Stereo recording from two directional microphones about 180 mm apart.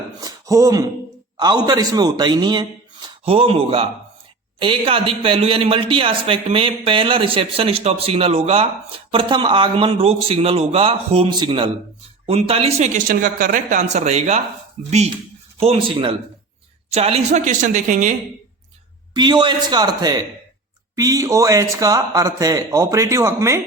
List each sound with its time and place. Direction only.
0.2 s a sound: 20° right (ahead or behind)
1.4 s a woman's voice: 25° right (ahead or behind); by 18.1 s 45° right (ahead or behind)
19.1 s speech: 25° right (ahead or behind)